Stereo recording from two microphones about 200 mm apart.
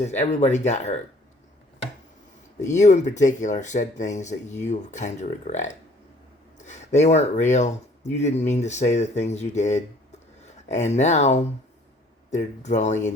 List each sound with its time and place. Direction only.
0.0 s speech: 35° left (ahead or behind)
2.7 s speech: 35° left (ahead or behind)